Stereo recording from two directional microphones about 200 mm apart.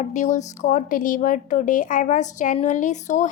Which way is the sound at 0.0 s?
35° left (ahead or behind).